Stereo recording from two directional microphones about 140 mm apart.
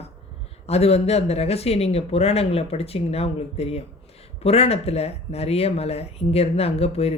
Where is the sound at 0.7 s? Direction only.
50° left (ahead or behind).